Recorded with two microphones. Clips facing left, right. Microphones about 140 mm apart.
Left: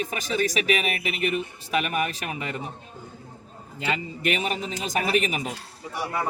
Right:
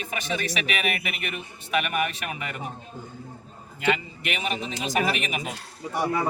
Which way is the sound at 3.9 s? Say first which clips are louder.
Even; 40° left (ahead or behind).